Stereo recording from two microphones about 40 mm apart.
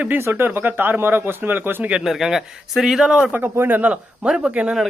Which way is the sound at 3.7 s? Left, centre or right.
Right.